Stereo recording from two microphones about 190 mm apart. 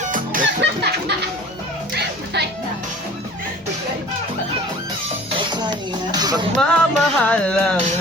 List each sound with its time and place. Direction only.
0.0 s music: 45° right (ahead or behind)
0.6 s music: 65° right (ahead or behind)
5.3 s music: 25° right (ahead or behind)
6.6 s music: 5° left (ahead or behind)